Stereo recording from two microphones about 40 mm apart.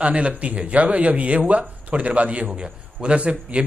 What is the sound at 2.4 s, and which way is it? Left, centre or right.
A man's voice, right.